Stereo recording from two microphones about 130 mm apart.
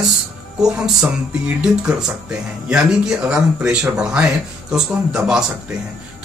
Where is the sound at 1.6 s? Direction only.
5° right (ahead or behind).